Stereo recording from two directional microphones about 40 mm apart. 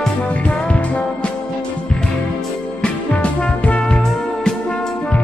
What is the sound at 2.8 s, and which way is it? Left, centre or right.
Music, left.